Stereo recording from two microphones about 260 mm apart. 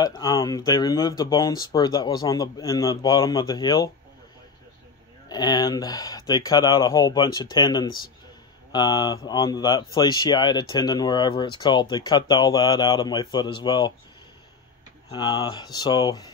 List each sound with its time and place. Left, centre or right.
0.0 s speech: centre
5.3 s speech: centre
15.0 s speech: centre